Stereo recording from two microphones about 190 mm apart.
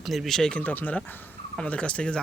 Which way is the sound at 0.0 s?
Centre (ahead or behind).